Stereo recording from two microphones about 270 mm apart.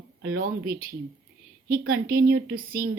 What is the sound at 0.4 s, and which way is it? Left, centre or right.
Speech, right.